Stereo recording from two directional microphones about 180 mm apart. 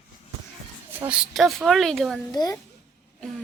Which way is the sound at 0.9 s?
10° right (ahead or behind).